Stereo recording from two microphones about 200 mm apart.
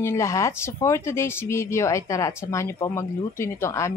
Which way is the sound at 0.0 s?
15° left (ahead or behind).